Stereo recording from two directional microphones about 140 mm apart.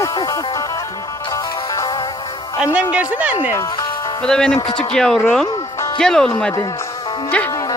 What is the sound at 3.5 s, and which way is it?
Speech, 20° left (ahead or behind).